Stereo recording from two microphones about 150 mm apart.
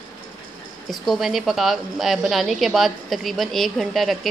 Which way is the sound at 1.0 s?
Centre (ahead or behind).